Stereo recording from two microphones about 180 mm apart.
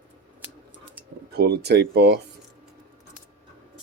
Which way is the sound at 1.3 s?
65° right (ahead or behind).